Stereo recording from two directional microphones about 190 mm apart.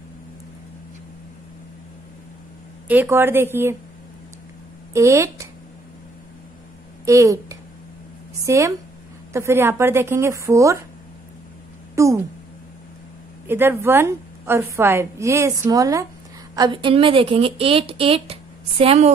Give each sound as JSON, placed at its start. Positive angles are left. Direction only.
{"t": 2.9, "sound": "a woman's voice", "side_deg": -10}
{"t": 4.9, "sound": "speech", "side_deg": -15}
{"t": 7.1, "sound": "a woman's voice", "side_deg": -15}
{"t": 11.9, "sound": "speech", "side_deg": -15}
{"t": 13.5, "sound": "a woman's voice", "side_deg": -10}